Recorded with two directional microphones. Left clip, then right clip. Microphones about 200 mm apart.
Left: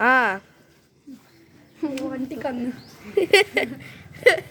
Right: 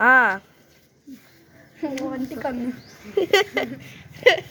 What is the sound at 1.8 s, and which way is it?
Speech, 20° left (ahead or behind).